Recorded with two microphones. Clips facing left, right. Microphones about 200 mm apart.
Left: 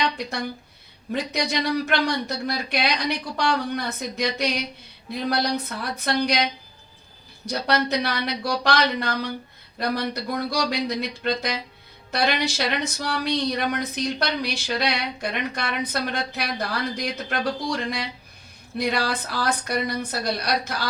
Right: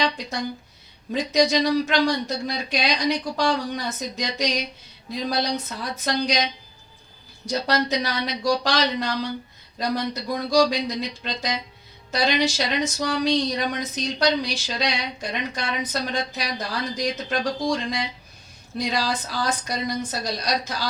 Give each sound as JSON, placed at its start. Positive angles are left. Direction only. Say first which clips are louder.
{"t": 0.0, "sound": "speech", "louder": "right 1 dB", "side_deg": 60}